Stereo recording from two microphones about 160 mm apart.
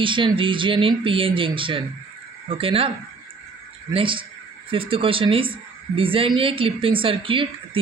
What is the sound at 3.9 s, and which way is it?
Speech, 35° right (ahead or behind).